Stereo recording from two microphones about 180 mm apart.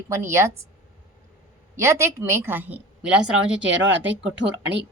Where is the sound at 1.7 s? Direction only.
15° right (ahead or behind).